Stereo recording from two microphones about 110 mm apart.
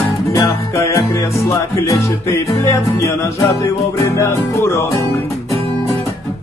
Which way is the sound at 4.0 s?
25° left (ahead or behind).